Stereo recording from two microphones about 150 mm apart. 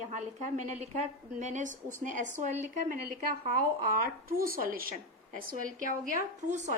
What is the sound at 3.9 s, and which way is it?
A woman's voice, 75° right (ahead or behind).